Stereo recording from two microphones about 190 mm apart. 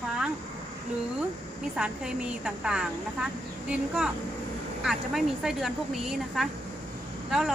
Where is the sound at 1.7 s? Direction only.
5° right (ahead or behind).